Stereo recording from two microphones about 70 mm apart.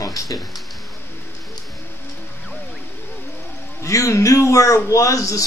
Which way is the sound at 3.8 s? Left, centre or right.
Left.